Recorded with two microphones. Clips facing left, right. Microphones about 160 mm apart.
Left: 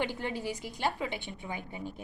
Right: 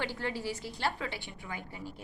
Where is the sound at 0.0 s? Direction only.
20° left (ahead or behind).